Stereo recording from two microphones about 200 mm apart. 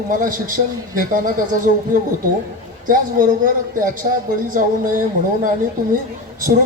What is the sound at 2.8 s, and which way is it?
Speech, 45° right (ahead or behind).